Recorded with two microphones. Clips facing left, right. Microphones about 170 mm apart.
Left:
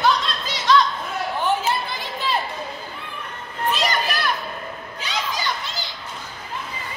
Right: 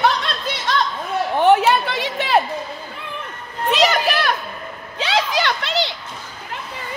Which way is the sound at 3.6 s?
85° right.